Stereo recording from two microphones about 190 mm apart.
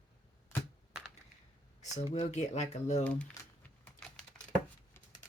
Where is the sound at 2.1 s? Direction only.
35° left (ahead or behind).